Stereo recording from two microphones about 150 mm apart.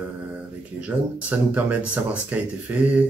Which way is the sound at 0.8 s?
10° right (ahead or behind).